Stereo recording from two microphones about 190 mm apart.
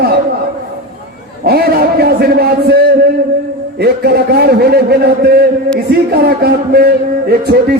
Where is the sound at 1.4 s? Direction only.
55° right (ahead or behind).